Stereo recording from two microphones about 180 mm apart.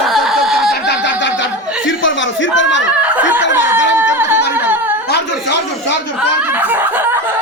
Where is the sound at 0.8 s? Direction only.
80° left.